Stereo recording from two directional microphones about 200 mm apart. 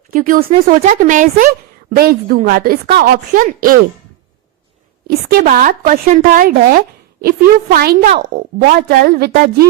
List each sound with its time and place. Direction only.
0.1 s a woman's voice: 40° right (ahead or behind)
5.0 s a woman's voice: 45° right (ahead or behind)